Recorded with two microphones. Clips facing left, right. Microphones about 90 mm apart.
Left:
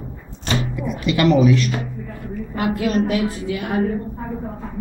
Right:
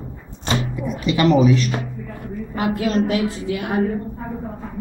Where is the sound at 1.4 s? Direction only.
35° right (ahead or behind).